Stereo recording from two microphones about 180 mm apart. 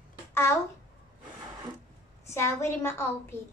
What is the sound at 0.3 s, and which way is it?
Babbling, 15° left (ahead or behind).